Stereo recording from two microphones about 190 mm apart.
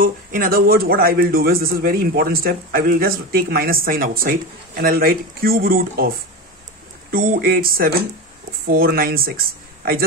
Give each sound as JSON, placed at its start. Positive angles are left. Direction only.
{"t": 0.0, "sound": "a man's voice", "side_deg": -50}